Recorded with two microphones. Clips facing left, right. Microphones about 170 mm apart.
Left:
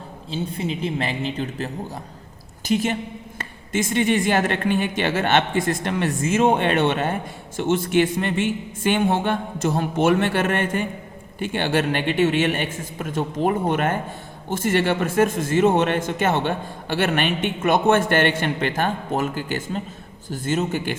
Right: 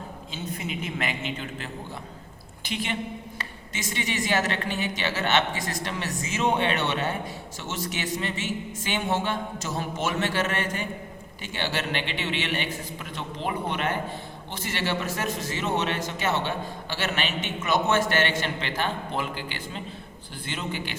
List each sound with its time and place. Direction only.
0.3 s a man's voice: 30° left (ahead or behind); by 20.9 s 45° left (ahead or behind)